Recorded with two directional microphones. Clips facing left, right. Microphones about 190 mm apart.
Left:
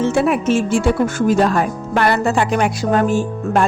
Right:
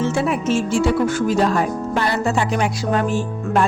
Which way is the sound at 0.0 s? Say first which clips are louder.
Left 4 dB; 60° left (ahead or behind).